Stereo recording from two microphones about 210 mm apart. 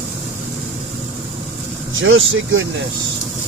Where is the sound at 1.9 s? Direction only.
65° right (ahead or behind).